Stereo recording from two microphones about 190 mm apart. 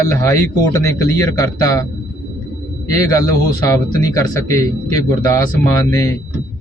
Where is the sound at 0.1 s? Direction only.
15° left (ahead or behind).